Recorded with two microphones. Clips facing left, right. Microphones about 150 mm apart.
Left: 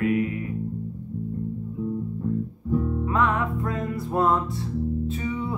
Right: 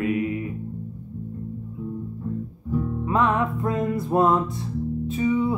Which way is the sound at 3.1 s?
25° right (ahead or behind).